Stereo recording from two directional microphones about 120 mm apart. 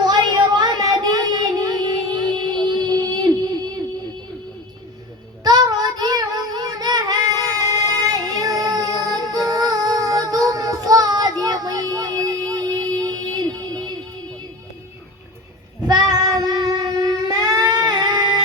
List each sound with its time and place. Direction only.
0.0 s child singing: 35° right (ahead or behind)
5.4 s child singing: 35° right (ahead or behind)
15.9 s child singing: 35° right (ahead or behind)